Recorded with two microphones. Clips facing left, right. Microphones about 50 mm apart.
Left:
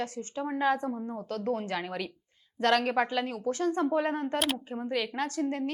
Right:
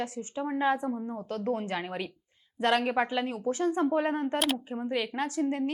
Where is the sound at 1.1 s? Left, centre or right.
Right.